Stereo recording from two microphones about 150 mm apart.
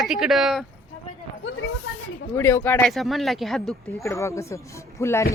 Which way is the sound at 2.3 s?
20° left (ahead or behind).